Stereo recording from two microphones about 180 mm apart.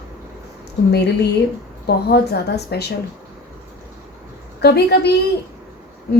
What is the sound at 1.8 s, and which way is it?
Speech, 65° left (ahead or behind).